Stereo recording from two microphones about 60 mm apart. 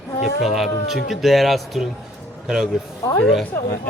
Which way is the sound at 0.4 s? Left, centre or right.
Centre.